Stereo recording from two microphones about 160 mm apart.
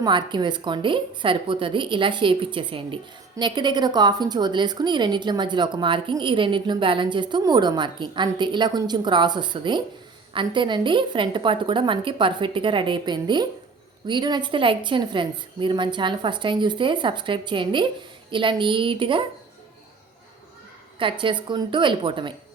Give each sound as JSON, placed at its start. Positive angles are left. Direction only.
{"t": 0.0, "sound": "a woman's voice", "side_deg": -30}
{"t": 21.0, "sound": "a woman's voice", "side_deg": -30}